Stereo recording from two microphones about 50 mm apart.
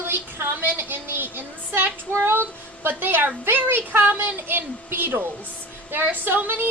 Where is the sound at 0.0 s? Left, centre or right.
Right.